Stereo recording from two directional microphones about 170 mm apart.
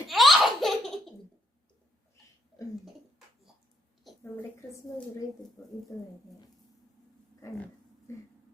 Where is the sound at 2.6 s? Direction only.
20° left (ahead or behind).